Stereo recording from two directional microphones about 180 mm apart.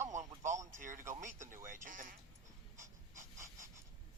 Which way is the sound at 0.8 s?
45° right (ahead or behind).